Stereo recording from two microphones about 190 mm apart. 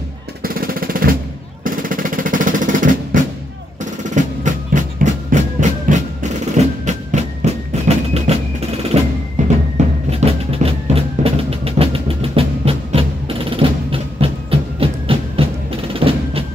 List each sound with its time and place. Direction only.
0.4 s a sound: 50° right (ahead or behind)
1.6 s jackhammer: 45° right (ahead or behind)
3.8 s music: 40° right (ahead or behind)